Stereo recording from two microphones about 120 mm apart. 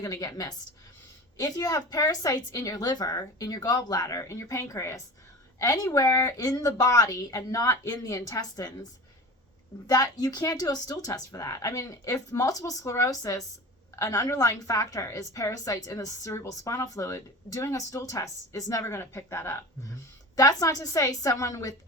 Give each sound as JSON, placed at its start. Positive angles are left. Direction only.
{"t": 0.0, "sound": "a woman's voice", "side_deg": 30}